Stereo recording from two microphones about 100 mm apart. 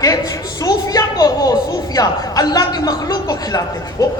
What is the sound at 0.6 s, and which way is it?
A woman's voice, 35° left (ahead or behind).